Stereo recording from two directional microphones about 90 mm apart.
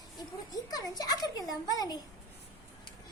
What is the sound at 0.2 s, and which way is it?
A child's voice, 45° left (ahead or behind).